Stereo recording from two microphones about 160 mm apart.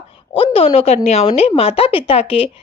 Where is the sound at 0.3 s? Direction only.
35° left (ahead or behind).